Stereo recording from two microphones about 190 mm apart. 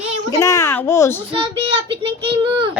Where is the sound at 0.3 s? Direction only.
15° left (ahead or behind).